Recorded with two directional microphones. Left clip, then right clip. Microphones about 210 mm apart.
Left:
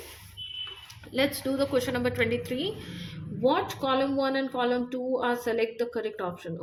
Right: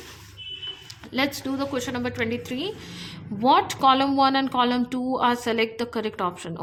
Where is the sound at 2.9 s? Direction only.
25° right (ahead or behind).